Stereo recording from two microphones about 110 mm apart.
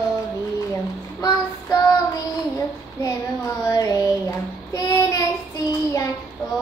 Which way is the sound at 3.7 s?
30° left (ahead or behind).